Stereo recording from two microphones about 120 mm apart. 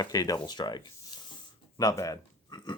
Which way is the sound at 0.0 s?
30° left (ahead or behind).